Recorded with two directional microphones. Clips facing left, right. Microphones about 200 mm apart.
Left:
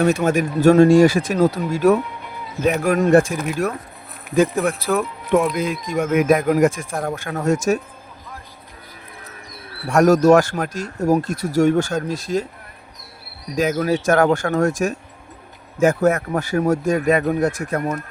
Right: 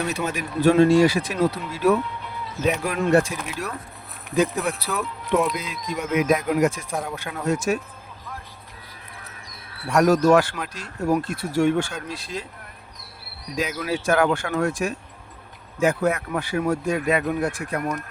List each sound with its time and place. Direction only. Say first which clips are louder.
0.0 s speech: left 9 dB; 50° left (ahead or behind)
4.8 s speech: left 7 dB; 50° left (ahead or behind)
9.9 s speech: left 4 dB; 45° left (ahead or behind)
13.6 s speech: left 7 dB; 45° left (ahead or behind)